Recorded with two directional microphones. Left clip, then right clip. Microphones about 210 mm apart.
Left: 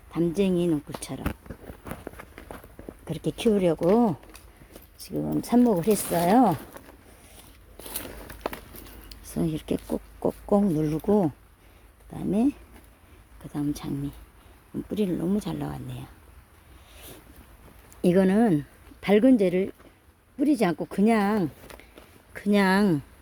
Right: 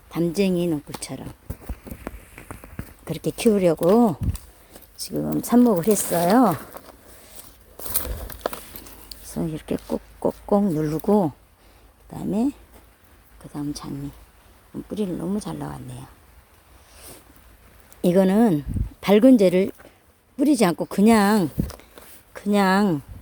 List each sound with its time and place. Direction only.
0.1 s speech: 20° right (ahead or behind)
3.0 s a woman's voice: 15° right (ahead or behind)
7.8 s a sound: 35° right (ahead or behind)
9.0 s a sound: centre (ahead or behind)
9.9 s a woman's voice: 5° right (ahead or behind)
18.0 s speech: 10° right (ahead or behind)